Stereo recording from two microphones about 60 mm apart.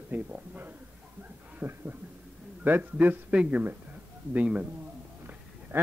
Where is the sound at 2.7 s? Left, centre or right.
Right.